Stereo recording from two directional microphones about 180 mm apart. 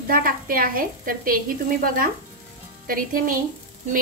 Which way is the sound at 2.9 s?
50° right (ahead or behind).